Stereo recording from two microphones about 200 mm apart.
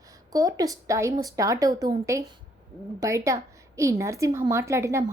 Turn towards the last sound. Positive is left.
turn(degrees=-15)  # may be behind; listen again after turning